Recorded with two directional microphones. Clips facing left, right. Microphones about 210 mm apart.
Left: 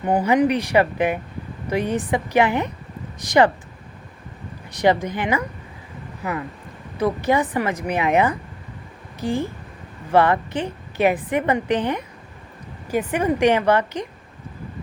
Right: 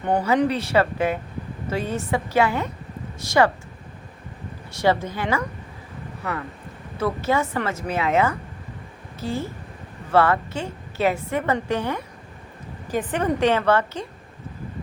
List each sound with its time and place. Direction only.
0.0 s a woman's voice: 10° left (ahead or behind)
4.7 s a woman's voice: 15° left (ahead or behind)
7.0 s a woman's voice: 15° left (ahead or behind)